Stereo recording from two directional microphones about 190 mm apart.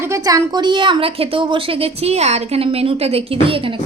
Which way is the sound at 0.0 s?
15° right (ahead or behind).